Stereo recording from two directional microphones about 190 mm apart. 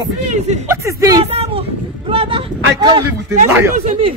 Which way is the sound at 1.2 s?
30° right (ahead or behind).